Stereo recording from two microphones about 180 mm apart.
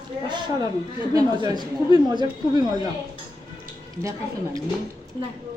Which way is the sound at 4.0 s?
15° right (ahead or behind).